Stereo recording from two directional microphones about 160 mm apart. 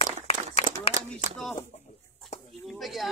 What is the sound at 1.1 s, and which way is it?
Speech, 5° left (ahead or behind).